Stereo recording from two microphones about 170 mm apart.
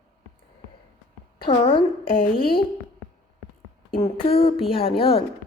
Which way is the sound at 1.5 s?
35° left (ahead or behind).